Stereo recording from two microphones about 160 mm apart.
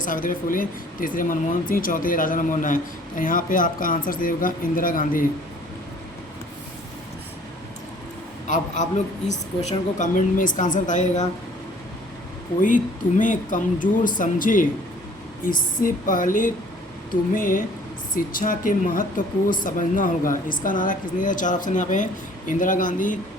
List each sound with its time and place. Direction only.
0.0 s speech: 60° left (ahead or behind)
8.4 s a woman's voice: 50° left (ahead or behind)
12.6 s speech: 55° left (ahead or behind)